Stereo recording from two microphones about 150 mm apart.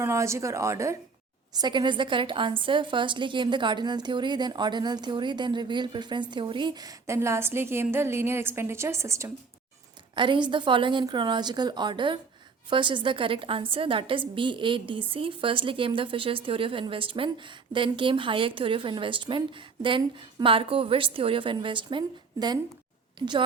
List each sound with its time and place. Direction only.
0.0 s a woman's voice: 20° right (ahead or behind)
10.2 s speech: 30° right (ahead or behind)